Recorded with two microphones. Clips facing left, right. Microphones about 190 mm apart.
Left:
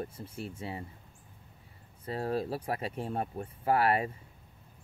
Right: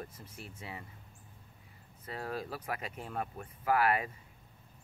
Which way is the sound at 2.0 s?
30° left (ahead or behind).